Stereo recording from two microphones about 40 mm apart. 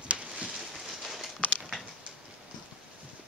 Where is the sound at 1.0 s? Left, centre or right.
Centre.